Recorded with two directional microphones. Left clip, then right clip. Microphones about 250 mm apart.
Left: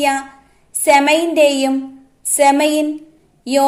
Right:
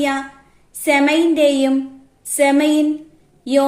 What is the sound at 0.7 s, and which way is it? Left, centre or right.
A woman's voice, left.